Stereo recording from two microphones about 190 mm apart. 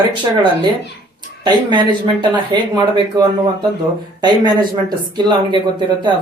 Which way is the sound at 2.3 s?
20° right (ahead or behind).